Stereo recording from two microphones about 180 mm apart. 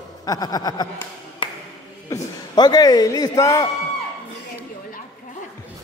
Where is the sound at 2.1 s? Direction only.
20° left (ahead or behind).